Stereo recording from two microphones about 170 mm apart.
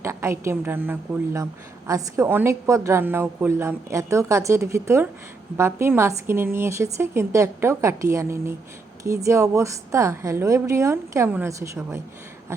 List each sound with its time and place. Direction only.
0.0 s a woman's voice: 15° right (ahead or behind)